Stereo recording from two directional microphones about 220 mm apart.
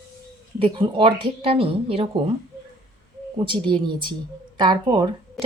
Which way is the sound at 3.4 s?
25° right (ahead or behind).